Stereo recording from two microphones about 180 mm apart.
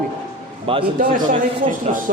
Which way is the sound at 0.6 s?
30° right (ahead or behind).